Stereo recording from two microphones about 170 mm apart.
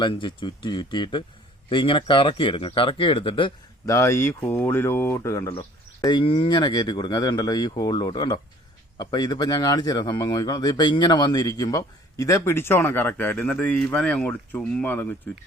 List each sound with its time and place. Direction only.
0.0 s speech: 30° left (ahead or behind)
3.8 s speech: 15° left (ahead or behind)
5.5 s speech: 30° left (ahead or behind); by 15.4 s 10° left (ahead or behind)